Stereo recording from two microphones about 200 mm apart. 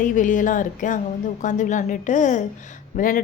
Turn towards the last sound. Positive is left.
turn(degrees=45)  # may be behind; listen again after turning